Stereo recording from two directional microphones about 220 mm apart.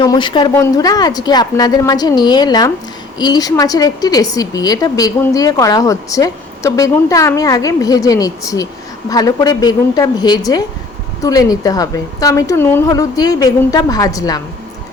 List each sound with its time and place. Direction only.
0.0 s a woman's voice: 20° left (ahead or behind)